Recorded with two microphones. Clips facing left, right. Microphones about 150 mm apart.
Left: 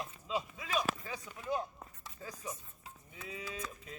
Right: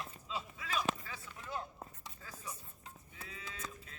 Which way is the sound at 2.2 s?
20° left (ahead or behind).